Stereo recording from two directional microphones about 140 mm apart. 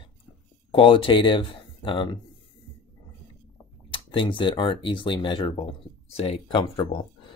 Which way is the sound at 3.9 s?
35° left (ahead or behind).